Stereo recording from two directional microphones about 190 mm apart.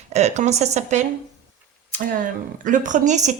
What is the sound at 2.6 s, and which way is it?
Speech, 40° right (ahead or behind).